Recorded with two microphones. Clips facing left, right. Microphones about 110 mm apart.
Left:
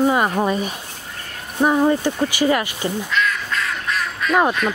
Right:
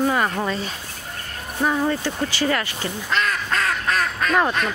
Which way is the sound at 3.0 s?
45° right (ahead or behind).